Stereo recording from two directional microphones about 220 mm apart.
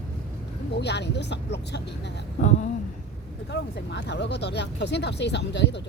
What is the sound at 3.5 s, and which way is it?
Speech, 50° left (ahead or behind).